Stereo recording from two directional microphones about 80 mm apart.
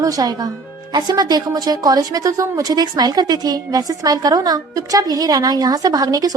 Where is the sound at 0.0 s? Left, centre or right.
Right.